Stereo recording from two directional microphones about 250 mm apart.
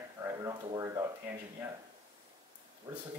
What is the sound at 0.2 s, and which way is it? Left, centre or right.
Speech, centre.